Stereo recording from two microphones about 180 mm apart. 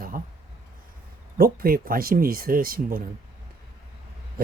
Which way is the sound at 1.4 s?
55° right (ahead or behind).